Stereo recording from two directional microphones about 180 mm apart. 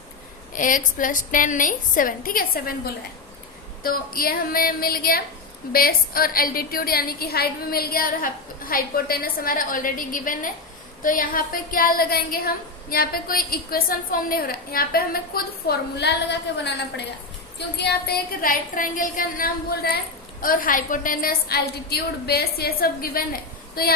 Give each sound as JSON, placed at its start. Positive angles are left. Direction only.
{"t": 0.5, "sound": "a woman's voice", "side_deg": 50}